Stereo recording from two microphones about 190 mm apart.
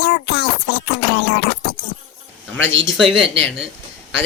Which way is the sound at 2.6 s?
90° right.